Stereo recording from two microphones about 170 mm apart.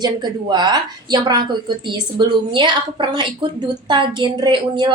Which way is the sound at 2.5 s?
30° right (ahead or behind).